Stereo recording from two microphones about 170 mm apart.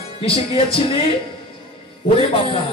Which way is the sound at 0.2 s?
35° left (ahead or behind).